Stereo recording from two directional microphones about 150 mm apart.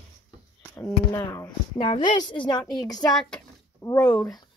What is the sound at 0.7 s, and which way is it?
Speech, 10° left (ahead or behind).